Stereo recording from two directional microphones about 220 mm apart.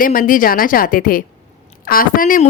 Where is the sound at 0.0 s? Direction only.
40° left (ahead or behind).